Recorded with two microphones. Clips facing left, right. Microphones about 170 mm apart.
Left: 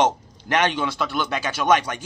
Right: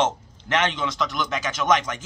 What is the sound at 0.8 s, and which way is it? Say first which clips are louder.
Speech: left 2 dB; 30° left (ahead or behind).